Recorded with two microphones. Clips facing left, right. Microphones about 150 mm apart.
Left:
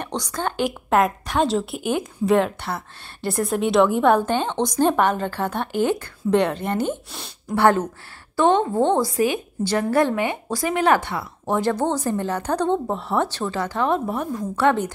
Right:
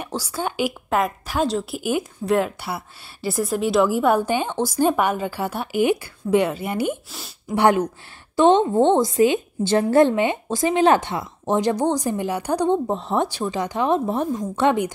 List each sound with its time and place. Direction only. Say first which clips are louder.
0.0 s a woman's voice: even; 5° right (ahead or behind)
7.5 s a woman's voice: even; 15° right (ahead or behind)